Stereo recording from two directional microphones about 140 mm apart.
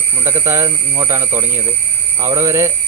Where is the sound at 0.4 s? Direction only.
20° right (ahead or behind).